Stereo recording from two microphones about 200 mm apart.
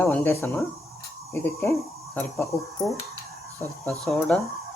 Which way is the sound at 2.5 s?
15° left (ahead or behind).